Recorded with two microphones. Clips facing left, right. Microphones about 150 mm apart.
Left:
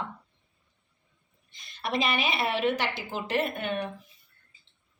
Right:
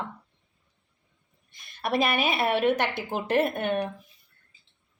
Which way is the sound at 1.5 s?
55° right (ahead or behind).